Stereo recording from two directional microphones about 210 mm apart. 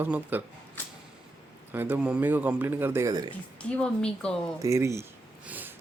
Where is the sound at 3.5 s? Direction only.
5° left (ahead or behind).